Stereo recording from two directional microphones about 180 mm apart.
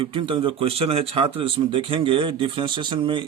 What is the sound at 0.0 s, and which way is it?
Speech, 30° right (ahead or behind).